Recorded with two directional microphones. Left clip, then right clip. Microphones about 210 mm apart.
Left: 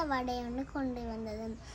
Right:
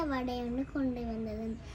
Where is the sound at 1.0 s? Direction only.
30° left (ahead or behind).